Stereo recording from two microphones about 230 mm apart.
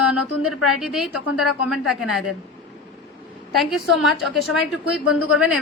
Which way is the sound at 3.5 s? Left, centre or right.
Centre.